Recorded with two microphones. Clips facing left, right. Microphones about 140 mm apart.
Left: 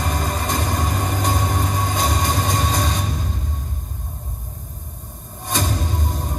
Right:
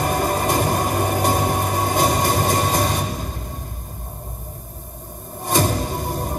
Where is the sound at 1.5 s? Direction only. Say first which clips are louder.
Right 3 dB; 60° right (ahead or behind).